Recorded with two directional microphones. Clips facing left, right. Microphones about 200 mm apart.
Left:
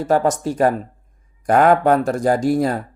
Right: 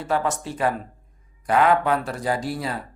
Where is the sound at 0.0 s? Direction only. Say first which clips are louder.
Left 7 dB; 45° left (ahead or behind).